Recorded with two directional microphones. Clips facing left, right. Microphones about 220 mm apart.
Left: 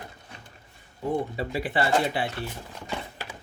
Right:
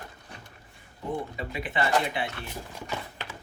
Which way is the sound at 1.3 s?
35° left (ahead or behind).